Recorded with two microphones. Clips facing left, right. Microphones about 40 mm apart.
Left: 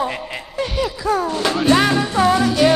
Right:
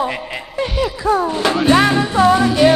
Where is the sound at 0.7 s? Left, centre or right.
Centre.